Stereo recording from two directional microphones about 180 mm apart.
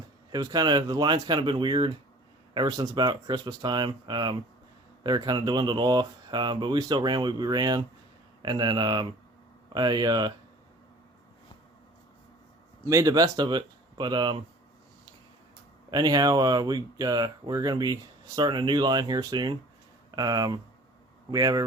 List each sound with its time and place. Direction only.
0.3 s speech: 20° right (ahead or behind)
12.8 s speech: 15° right (ahead or behind)
15.9 s speech: 20° right (ahead or behind)